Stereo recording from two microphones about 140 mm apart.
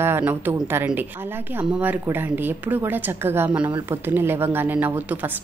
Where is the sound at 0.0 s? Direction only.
15° right (ahead or behind).